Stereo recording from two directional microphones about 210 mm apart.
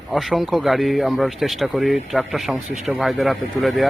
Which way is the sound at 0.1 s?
Centre (ahead or behind).